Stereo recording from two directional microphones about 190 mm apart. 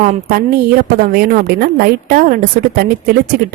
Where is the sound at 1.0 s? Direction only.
50° right (ahead or behind).